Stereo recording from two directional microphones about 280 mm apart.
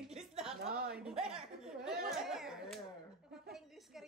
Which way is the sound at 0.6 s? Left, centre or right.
Right.